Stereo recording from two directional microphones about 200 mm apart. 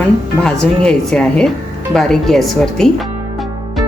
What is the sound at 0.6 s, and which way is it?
A woman's voice, 5° left (ahead or behind).